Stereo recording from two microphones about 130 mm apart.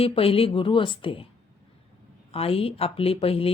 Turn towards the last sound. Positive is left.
turn(degrees=45)  # may be behind; listen again after turning